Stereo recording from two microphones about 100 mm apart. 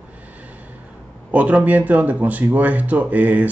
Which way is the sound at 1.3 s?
15° right (ahead or behind).